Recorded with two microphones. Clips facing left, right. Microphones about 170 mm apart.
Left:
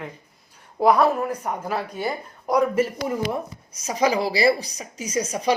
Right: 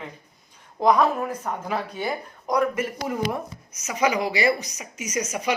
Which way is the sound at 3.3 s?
30° left (ahead or behind).